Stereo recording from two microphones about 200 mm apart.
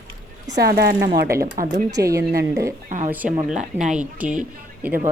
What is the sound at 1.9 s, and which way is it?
A woman's voice, 15° right (ahead or behind).